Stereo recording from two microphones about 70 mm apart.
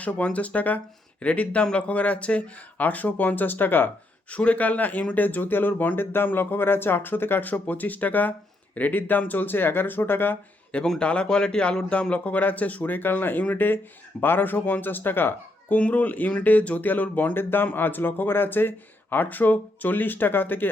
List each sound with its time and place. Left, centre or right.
0.0 s speech: centre
10.8 s a man's voice: centre; by 20.7 s left